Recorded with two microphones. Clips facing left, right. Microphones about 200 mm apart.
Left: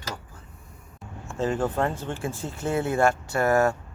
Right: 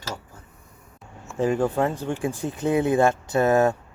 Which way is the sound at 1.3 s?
15° right (ahead or behind).